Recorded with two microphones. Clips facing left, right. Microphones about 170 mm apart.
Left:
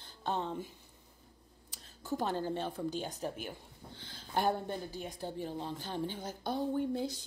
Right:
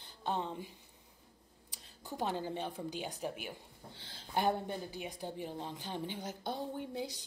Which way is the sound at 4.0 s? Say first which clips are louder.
Left 3 dB; 30° right (ahead or behind).